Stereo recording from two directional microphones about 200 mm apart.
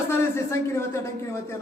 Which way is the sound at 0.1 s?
15° left (ahead or behind).